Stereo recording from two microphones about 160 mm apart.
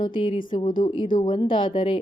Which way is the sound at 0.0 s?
30° left (ahead or behind).